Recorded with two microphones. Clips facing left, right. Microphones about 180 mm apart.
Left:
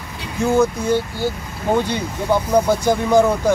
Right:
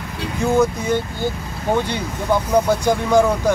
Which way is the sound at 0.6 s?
5° left (ahead or behind).